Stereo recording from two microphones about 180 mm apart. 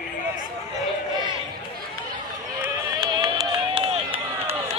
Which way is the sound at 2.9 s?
20° right (ahead or behind).